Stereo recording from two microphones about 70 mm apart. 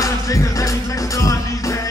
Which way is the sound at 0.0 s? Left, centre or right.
Left.